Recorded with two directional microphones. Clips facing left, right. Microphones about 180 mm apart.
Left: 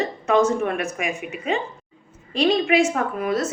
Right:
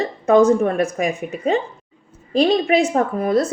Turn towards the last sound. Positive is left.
turn(degrees=-35)  # may be behind; listen again after turning